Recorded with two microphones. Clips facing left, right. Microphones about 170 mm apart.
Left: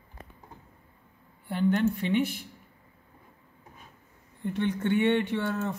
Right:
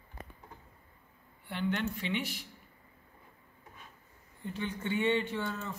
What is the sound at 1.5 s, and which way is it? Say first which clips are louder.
Speech: left 8 dB; 45° left (ahead or behind).